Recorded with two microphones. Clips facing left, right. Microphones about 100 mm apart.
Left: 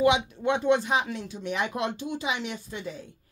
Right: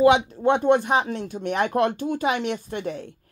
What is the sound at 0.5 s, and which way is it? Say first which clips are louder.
Speech: right 5 dB; 50° right (ahead or behind).